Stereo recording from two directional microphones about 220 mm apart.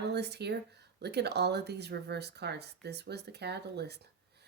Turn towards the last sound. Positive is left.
turn(degrees=-50)  # may be behind; listen again after turning